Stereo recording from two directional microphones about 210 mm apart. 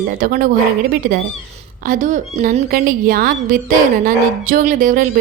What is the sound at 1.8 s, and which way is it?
Speech, 40° right (ahead or behind).